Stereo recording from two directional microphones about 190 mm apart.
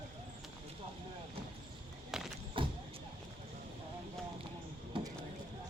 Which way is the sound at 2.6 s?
25° right (ahead or behind).